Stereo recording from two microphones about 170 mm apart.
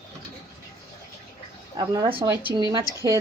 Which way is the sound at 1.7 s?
25° right (ahead or behind).